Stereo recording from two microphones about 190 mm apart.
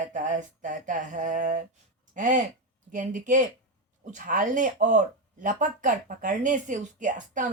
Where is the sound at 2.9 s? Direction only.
40° right (ahead or behind).